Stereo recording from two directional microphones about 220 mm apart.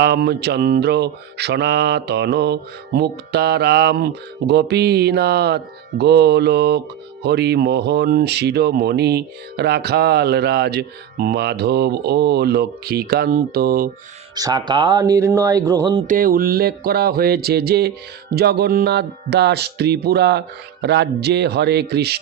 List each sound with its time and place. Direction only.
0.0 s speech: 50° right (ahead or behind)
14.3 s speech: 20° right (ahead or behind)
16.0 s speech: 40° right (ahead or behind)